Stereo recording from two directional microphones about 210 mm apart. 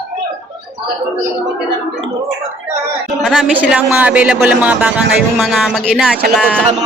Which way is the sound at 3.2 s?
5° right (ahead or behind).